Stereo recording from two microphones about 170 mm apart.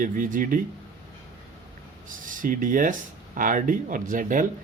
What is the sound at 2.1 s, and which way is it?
Speech, 50° right (ahead or behind).